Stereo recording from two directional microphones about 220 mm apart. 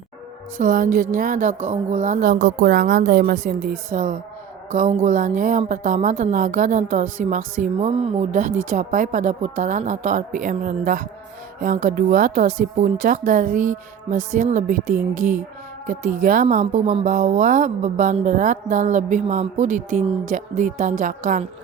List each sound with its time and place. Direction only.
0.5 s a woman's voice: 40° right (ahead or behind)